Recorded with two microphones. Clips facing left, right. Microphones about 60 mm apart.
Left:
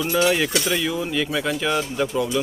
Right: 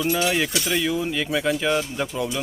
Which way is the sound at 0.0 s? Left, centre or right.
Centre.